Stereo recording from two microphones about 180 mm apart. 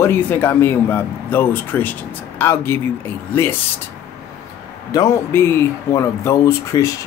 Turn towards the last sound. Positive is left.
turn(degrees=15)  # may be behind; listen again after turning